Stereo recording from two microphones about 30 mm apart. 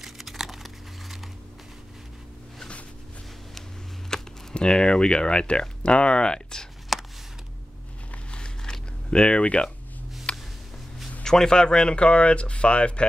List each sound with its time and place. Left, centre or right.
0.0 s crumpling: centre
4.1 s computer keyboard: left
4.6 s speech: left
6.9 s a sound: centre
8.3 s a sound: left
9.1 s speech: left
9.4 s speech: left
10.3 s music: left
11.2 s speech: left